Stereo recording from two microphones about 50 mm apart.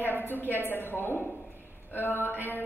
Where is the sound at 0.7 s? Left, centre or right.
Left.